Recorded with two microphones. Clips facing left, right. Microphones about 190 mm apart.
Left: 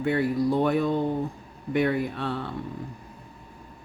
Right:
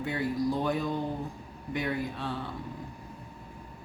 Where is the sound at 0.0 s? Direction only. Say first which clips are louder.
Left 6 dB; 60° left (ahead or behind).